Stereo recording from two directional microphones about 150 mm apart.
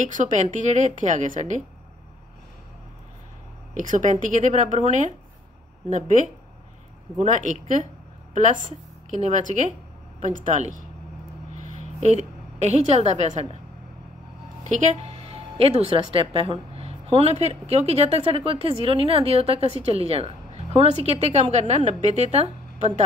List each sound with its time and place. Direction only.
0.0 s a woman's voice: 55° right (ahead or behind)
3.7 s a woman's voice: 55° right (ahead or behind)
14.6 s a woman's voice: 50° right (ahead or behind)